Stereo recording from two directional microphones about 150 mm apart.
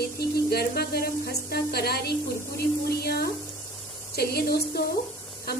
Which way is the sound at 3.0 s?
90° left.